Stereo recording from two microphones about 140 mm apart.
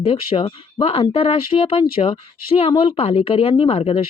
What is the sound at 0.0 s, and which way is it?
Speech, 40° left (ahead or behind).